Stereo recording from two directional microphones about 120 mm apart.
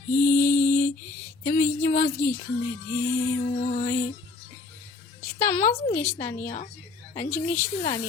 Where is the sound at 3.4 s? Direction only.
90° left.